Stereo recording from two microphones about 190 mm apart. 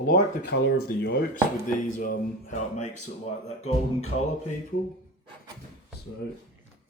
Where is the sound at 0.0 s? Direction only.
55° left (ahead or behind); by 3.1 s 40° left (ahead or behind).